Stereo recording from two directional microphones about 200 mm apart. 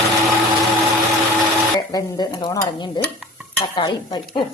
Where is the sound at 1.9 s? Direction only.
20° left (ahead or behind).